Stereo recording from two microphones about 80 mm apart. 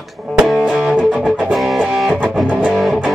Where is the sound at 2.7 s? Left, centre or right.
Centre.